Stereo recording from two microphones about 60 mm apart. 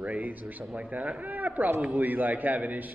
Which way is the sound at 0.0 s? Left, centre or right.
Right.